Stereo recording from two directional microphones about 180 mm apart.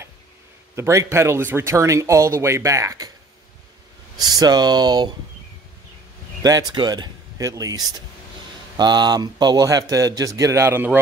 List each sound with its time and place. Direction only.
0.7 s speech: 15° right (ahead or behind)
4.2 s speech: 20° right (ahead or behind)
6.4 s speech: 20° right (ahead or behind)